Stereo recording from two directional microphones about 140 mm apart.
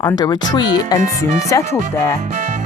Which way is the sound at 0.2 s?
30° left (ahead or behind).